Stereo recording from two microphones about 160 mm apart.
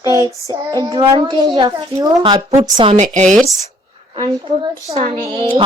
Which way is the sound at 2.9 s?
50° right (ahead or behind).